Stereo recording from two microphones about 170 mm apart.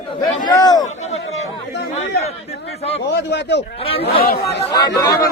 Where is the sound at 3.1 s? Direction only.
80° left.